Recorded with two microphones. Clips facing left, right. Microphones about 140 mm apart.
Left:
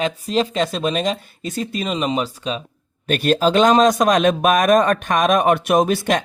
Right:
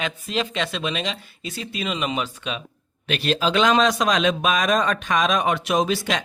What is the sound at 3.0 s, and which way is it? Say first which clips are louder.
A man's voice: left 6 dB; 45° left (ahead or behind).